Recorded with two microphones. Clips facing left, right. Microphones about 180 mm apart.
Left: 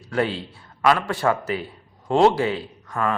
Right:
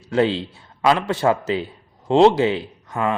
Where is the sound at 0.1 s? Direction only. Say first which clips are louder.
Right 5 dB; 25° right (ahead or behind).